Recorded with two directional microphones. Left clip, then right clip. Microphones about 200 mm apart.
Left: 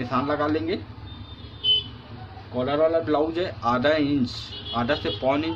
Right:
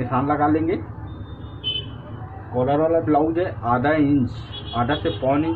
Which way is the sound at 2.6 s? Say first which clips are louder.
Right 3 dB; 30° left (ahead or behind).